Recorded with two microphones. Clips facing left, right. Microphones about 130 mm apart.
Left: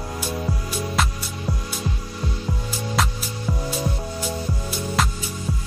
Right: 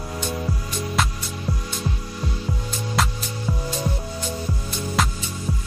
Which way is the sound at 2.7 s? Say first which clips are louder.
Even; centre (ahead or behind).